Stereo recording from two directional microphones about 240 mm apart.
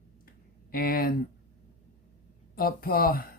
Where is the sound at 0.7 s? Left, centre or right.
Left.